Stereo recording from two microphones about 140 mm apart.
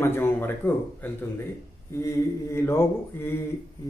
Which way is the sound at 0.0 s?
15° left (ahead or behind).